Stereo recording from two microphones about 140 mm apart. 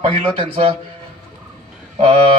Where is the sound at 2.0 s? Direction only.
45° right (ahead or behind).